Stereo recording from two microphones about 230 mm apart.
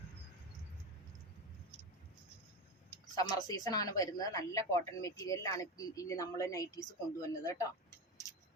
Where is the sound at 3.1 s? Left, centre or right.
Centre.